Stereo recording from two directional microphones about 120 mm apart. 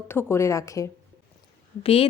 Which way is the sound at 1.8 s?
55° left (ahead or behind).